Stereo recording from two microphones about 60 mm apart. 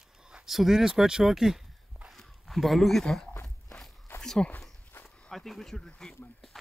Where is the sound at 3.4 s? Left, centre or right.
Centre.